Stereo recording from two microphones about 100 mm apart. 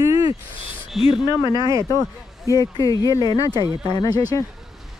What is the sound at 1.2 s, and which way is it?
Speech, 50° left (ahead or behind).